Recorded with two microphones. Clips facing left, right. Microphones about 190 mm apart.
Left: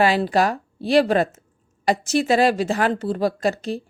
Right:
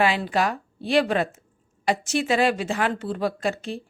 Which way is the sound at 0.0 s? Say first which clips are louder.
Left 4 dB; 40° left (ahead or behind).